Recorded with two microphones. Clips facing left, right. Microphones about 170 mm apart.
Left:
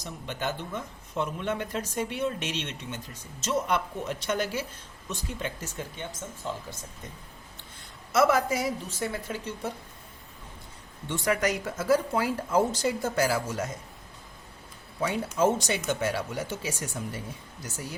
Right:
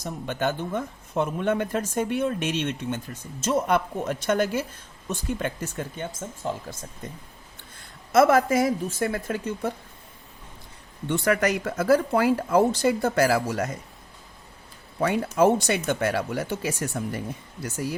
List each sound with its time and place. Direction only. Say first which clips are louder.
0.0 s speech: right 6 dB; 50° right (ahead or behind)
8.1 s speech: right 5 dB; 50° right (ahead or behind)
11.1 s speech: right 4 dB; 60° right (ahead or behind)
15.0 s speech: right 5 dB; 60° right (ahead or behind)